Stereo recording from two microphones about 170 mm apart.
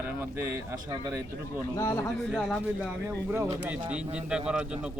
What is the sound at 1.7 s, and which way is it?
Speech, 20° left (ahead or behind).